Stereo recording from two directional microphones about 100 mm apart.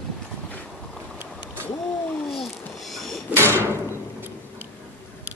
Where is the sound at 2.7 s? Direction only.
Centre (ahead or behind).